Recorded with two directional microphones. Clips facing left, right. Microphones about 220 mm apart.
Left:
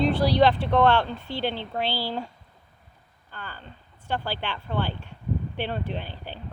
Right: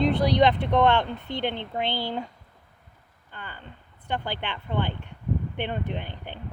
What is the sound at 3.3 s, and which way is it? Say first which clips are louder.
Speech: left 1 dB; 20° right (ahead or behind).